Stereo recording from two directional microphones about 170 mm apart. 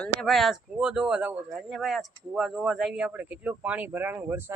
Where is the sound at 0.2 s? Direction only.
Centre (ahead or behind).